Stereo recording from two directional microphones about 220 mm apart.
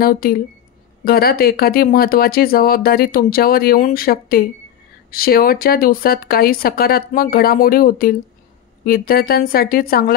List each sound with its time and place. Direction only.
0.0 s speech: 40° left (ahead or behind)